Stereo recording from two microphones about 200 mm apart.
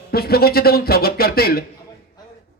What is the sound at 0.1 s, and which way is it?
Speech, 50° left (ahead or behind).